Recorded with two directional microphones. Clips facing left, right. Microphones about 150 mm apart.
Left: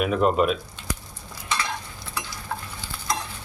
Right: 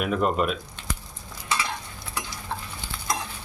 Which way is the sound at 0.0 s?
Centre (ahead or behind).